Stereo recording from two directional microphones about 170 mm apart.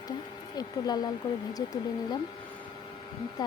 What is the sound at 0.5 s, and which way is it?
Speech, 25° left (ahead or behind).